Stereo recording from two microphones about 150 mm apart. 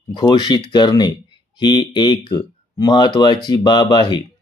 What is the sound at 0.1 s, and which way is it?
Speech, 30° left (ahead or behind).